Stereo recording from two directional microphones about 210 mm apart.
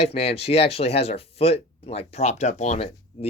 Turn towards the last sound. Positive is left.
turn(degrees=30)  # may be behind; listen again after turning